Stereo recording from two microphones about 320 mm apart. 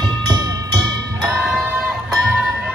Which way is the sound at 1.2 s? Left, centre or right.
Centre.